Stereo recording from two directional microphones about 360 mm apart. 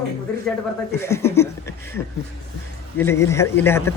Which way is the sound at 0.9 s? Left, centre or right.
Centre.